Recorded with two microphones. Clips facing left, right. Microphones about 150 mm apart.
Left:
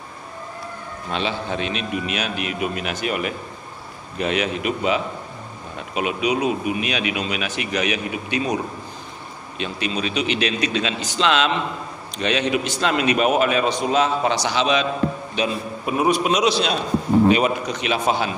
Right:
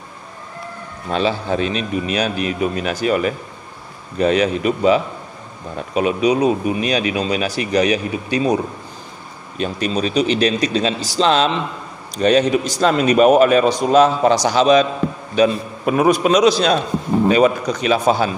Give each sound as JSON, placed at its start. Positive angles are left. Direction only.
{"t": 1.1, "sound": "a man's voice", "side_deg": -40}
{"t": 9.6, "sound": "a man's voice", "side_deg": -40}